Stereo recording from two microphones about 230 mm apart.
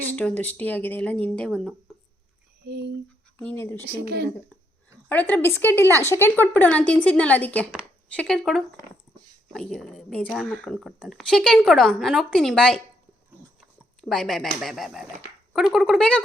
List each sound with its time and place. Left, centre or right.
0.0 s speech: centre
2.6 s speech: right
3.3 s speech: centre
4.0 s speech: right
5.0 s speech: centre
14.0 s speech: centre